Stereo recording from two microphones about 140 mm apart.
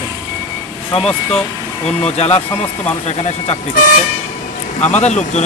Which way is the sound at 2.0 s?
45° left (ahead or behind).